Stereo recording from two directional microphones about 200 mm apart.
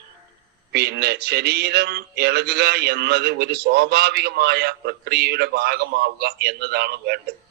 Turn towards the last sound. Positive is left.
turn(degrees=-55)  # may be behind; listen again after turning